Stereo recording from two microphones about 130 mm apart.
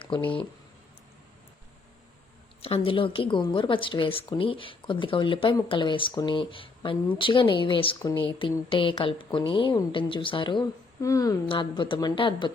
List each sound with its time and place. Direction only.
0.0 s speech: 40° left (ahead or behind)
2.6 s speech: 45° left (ahead or behind)
11.0 s a woman's voice: 25° left (ahead or behind)
11.4 s speech: 40° left (ahead or behind)